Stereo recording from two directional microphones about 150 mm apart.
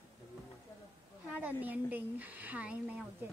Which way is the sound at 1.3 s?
10° right (ahead or behind).